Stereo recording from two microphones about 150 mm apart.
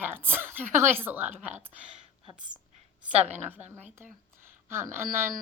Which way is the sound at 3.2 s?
45° right (ahead or behind).